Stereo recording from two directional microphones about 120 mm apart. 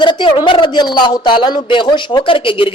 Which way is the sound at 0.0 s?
40° left (ahead or behind).